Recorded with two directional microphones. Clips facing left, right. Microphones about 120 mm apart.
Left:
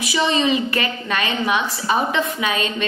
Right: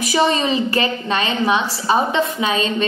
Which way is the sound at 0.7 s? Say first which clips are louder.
Right 3 dB; 30° right (ahead or behind).